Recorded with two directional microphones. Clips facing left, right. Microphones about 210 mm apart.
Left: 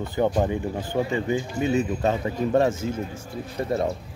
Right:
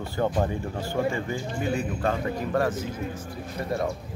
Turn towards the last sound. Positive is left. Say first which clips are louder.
# left 3 dB
turn(degrees=25)  # may be behind; listen again after turning